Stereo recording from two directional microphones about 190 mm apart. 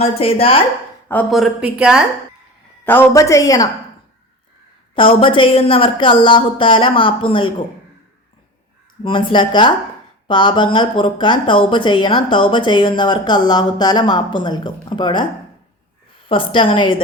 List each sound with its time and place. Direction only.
0.0 s speech: 30° left (ahead or behind)
1.3 s speech: 5° right (ahead or behind)
2.8 s a woman's voice: 10° left (ahead or behind)
4.9 s speech: 25° left (ahead or behind)
9.0 s speech: 25° left (ahead or behind)
16.3 s speech: 25° left (ahead or behind)